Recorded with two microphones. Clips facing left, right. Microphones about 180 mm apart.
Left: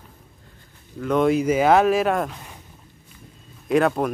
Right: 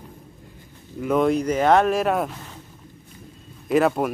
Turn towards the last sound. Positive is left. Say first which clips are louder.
# even
turn(degrees=0)  # may be behind; listen again after turning